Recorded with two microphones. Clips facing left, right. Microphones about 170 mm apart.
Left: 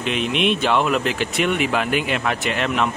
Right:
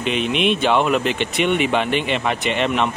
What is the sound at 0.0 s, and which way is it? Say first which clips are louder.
Speech: right 1 dB; centre (ahead or behind).